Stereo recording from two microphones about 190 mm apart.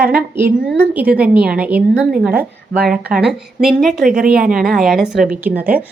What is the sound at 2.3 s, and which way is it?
Speech, 55° right (ahead or behind).